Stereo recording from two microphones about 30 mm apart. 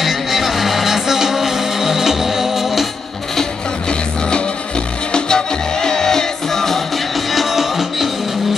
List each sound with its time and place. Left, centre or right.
0.0 s music: centre
5.1 s music: left
7.3 s music: centre